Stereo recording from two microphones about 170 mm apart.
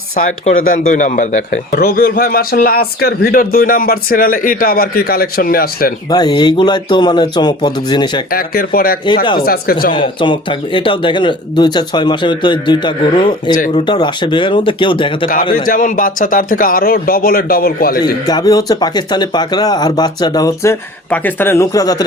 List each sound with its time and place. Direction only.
0.2 s speech: 50° left (ahead or behind)
6.1 s speech: 25° left (ahead or behind)
8.3 s speech: 60° left (ahead or behind)
9.9 s speech: 30° left (ahead or behind)
15.5 s speech: 55° left (ahead or behind)
18.0 s speech: 25° left (ahead or behind)
21.1 s speech: 10° left (ahead or behind)